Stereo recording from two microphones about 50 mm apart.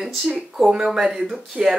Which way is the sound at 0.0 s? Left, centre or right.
Centre.